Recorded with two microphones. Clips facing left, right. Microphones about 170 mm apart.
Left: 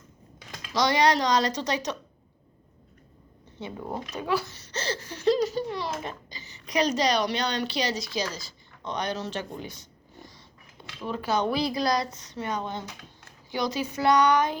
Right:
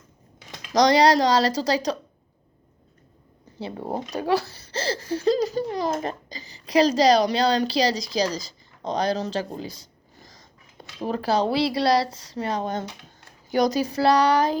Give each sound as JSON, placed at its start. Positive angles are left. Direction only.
{"t": 0.7, "sound": "a child's voice", "side_deg": -40}
{"t": 3.6, "sound": "a child's voice", "side_deg": -35}
{"t": 11.0, "sound": "a child's voice", "side_deg": -40}